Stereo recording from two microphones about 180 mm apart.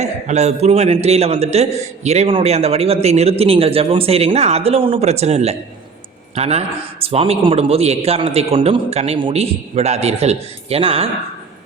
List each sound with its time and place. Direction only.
0.0 s a man's voice: 40° right (ahead or behind)